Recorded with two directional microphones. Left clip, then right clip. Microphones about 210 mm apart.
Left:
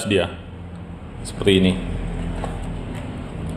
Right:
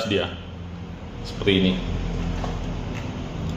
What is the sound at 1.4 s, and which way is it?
Speech, 60° left (ahead or behind).